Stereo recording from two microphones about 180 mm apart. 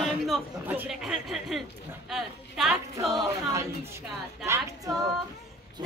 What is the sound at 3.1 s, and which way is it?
Speech, 20° right (ahead or behind).